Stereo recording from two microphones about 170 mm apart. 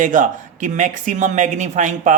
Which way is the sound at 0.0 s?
50° right (ahead or behind).